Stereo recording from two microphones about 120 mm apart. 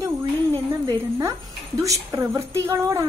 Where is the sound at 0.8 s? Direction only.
30° right (ahead or behind).